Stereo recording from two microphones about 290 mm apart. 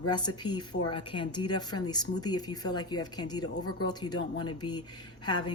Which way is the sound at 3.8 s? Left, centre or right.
Centre.